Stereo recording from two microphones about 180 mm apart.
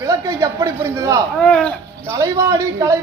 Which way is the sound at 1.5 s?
5° left (ahead or behind).